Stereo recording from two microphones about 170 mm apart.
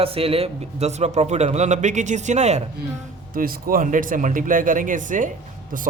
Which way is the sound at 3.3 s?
55° right (ahead or behind).